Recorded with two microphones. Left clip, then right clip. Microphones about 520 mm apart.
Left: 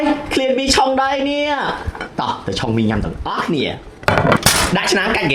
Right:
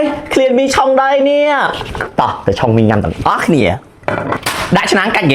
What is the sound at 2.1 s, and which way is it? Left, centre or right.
Speech, right.